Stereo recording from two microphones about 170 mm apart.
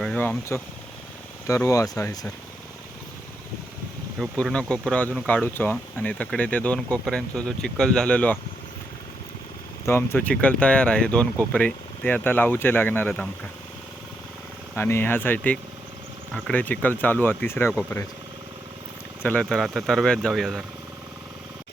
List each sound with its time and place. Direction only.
0.0 s speech: 10° left (ahead or behind)
4.2 s speech: centre (ahead or behind)
9.8 s speech: 15° left (ahead or behind)
14.8 s speech: 15° left (ahead or behind)
19.2 s speech: 5° left (ahead or behind)